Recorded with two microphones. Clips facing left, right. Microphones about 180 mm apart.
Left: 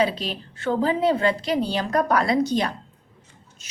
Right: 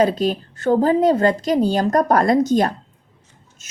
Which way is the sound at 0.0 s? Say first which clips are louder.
Right 6 dB; 45° right (ahead or behind).